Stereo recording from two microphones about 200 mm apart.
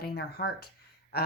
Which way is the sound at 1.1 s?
50° left (ahead or behind).